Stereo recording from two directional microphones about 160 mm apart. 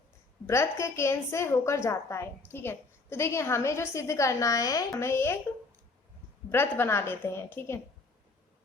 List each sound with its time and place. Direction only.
0.4 s a woman's voice: 15° left (ahead or behind)
6.5 s a woman's voice: 15° left (ahead or behind)